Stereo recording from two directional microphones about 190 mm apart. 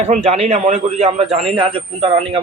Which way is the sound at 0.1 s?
35° right (ahead or behind).